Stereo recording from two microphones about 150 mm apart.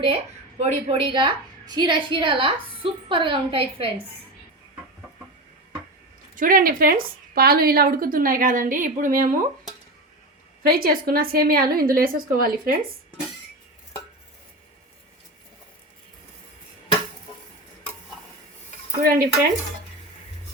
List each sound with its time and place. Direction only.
0.6 s a woman's voice: 40° right (ahead or behind)
6.3 s a woman's voice: 65° right (ahead or behind)
10.6 s a woman's voice: 80° right
19.0 s stir: 80° right